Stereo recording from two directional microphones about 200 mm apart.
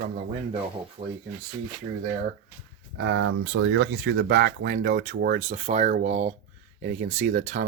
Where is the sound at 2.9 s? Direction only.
65° right (ahead or behind); by 7.6 s 40° right (ahead or behind).